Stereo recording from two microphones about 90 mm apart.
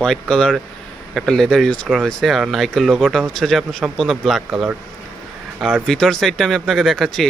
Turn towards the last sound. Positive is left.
turn(degrees=0)  # may be behind; listen again after turning